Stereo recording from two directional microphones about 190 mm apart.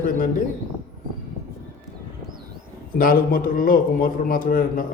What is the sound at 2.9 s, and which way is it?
A man's voice, 50° left (ahead or behind).